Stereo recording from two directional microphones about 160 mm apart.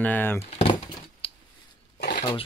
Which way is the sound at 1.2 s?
35° left (ahead or behind).